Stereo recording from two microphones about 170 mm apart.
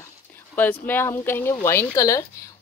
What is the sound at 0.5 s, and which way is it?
Speech, 10° left (ahead or behind).